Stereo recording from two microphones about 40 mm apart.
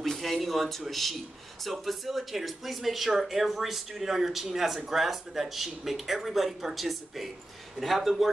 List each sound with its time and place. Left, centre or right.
0.0 s speech: centre